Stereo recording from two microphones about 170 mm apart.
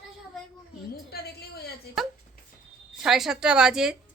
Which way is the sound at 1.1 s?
70° left (ahead or behind).